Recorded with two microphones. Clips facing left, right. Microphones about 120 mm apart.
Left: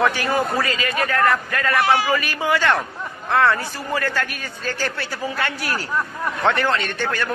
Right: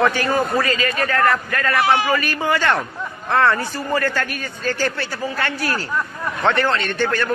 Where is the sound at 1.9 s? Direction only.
20° right (ahead or behind).